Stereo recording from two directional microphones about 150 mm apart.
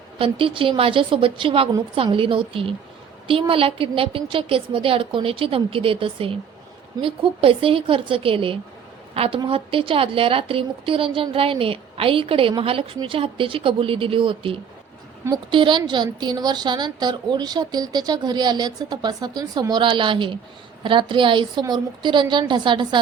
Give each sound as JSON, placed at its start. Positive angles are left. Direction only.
{"t": 0.2, "sound": "a woman's voice", "side_deg": -35}